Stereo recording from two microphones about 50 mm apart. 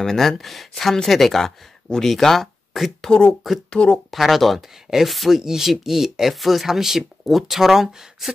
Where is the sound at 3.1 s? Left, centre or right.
Centre.